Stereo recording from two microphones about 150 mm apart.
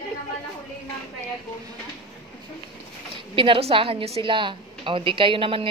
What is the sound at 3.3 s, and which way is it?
A woman's voice, 35° right (ahead or behind).